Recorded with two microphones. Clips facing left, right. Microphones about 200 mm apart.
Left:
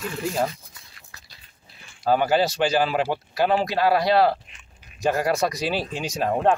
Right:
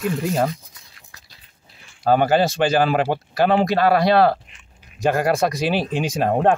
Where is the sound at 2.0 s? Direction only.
55° right (ahead or behind).